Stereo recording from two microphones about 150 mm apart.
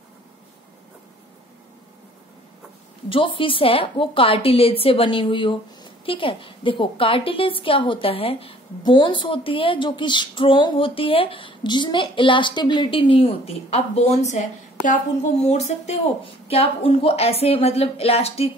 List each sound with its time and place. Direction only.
3.1 s a woman's voice: 35° left (ahead or behind)